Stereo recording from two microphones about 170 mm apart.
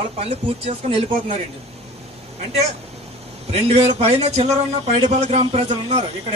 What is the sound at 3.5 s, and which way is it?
A man's voice, 40° right (ahead or behind).